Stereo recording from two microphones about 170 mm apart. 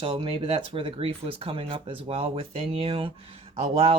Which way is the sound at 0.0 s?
30° right (ahead or behind).